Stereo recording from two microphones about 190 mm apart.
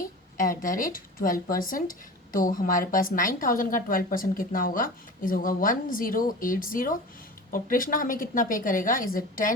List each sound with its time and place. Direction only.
0.3 s speech: 45° left (ahead or behind)